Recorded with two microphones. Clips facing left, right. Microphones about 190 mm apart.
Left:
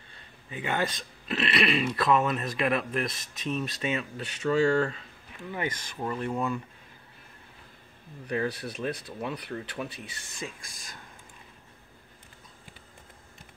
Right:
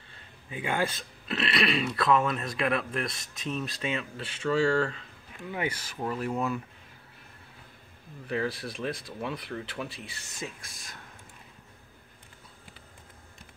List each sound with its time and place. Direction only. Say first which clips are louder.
0.5 s speech: even; 10° right (ahead or behind)
5.5 s speech: right 1 dB; 10° right (ahead or behind)
8.3 s speech: left 1 dB; centre (ahead or behind)